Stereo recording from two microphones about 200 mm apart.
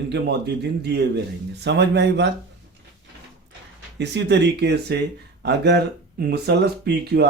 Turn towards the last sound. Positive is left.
turn(degrees=-55)  # may be behind; listen again after turning